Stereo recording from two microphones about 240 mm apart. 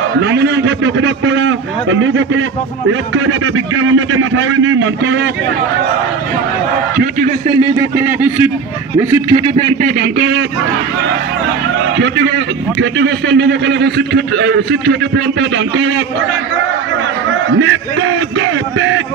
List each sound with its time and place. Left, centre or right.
0.2 s a man's voice: right
7.0 s a man's voice: right
7.6 s speech: centre
12.0 s a man's voice: right
17.6 s a sound: right